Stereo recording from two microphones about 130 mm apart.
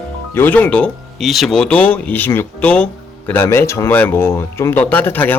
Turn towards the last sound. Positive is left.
turn(degrees=15)  # may be behind; listen again after turning